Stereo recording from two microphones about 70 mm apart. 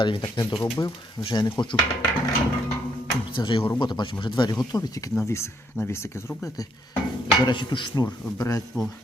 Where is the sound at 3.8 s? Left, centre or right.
Left.